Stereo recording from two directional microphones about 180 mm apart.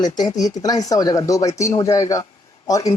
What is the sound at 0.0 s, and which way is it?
Speech, 25° left (ahead or behind).